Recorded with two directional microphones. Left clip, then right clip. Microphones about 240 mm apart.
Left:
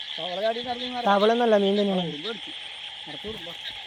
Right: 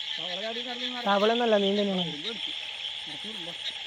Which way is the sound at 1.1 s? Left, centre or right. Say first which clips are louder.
Left 4 dB; centre.